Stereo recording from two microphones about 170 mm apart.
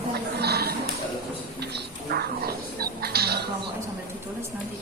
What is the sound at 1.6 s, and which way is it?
Music, 75° right (ahead or behind).